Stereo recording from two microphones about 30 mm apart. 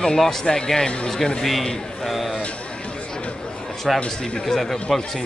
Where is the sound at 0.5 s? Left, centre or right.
Centre.